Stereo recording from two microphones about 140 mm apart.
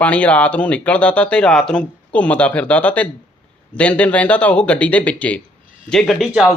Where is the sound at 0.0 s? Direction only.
10° left (ahead or behind).